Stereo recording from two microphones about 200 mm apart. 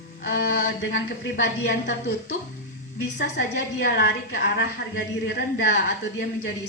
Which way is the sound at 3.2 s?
55° left (ahead or behind).